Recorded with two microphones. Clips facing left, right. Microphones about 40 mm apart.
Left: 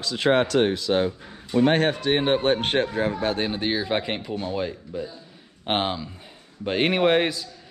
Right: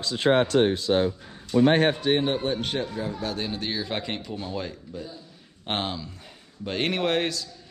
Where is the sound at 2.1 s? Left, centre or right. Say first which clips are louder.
Left 3 dB; left.